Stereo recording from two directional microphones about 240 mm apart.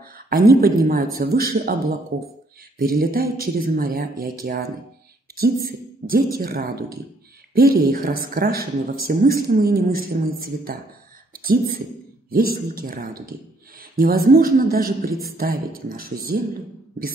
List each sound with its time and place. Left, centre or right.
0.3 s speech: right